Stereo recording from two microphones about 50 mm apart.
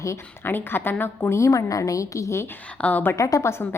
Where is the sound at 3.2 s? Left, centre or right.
Left.